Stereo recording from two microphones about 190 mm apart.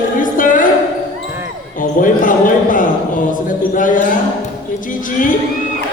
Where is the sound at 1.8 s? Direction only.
45° left (ahead or behind).